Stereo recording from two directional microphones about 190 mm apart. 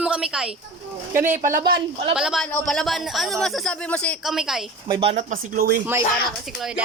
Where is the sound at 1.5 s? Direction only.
55° right (ahead or behind).